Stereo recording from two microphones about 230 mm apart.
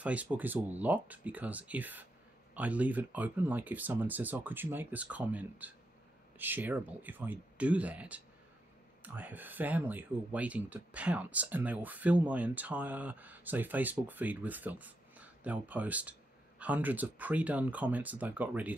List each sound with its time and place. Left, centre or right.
0.0 s speech: centre